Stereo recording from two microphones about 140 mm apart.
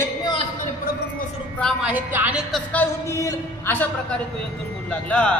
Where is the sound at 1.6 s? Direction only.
Centre (ahead or behind).